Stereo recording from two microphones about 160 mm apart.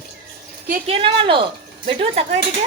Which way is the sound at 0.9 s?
35° right (ahead or behind).